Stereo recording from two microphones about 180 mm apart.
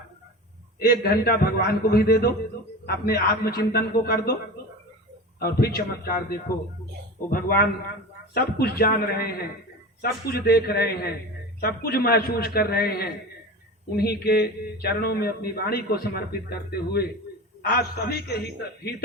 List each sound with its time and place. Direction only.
0.8 s a man's voice: 60° left (ahead or behind)
5.4 s a man's voice: 60° left (ahead or behind)